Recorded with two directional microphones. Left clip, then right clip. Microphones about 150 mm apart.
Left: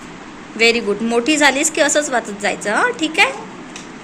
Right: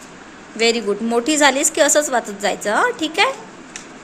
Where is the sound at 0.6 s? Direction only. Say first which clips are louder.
Left 3 dB; 30° right (ahead or behind).